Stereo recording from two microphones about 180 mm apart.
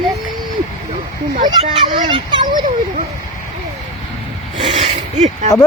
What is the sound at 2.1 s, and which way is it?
Speech, 25° right (ahead or behind).